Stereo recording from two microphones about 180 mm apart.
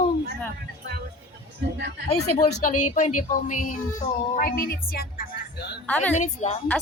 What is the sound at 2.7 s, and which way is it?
Speech, 40° left (ahead or behind).